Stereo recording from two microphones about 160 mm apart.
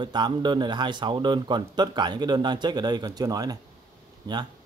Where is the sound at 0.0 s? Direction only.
30° right (ahead or behind).